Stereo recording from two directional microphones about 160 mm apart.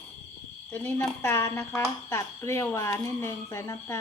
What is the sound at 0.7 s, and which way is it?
Speech, 15° left (ahead or behind).